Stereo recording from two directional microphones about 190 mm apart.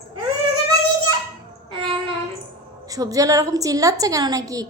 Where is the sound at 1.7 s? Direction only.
30° right (ahead or behind).